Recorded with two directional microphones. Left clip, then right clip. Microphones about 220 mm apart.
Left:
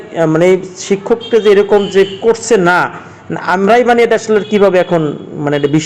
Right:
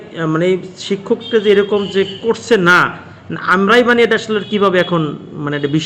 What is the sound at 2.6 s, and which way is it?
A man's voice, 5° right (ahead or behind).